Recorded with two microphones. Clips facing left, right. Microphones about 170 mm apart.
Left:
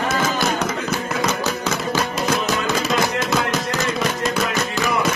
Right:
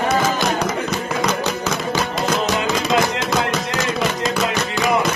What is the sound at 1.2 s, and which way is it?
Music, 5° left (ahead or behind).